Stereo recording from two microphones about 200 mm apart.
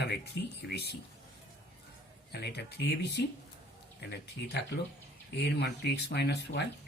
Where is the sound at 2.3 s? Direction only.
55° left (ahead or behind).